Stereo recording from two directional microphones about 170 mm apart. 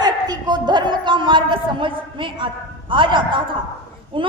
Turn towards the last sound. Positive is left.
turn(degrees=-30)  # may be behind; listen again after turning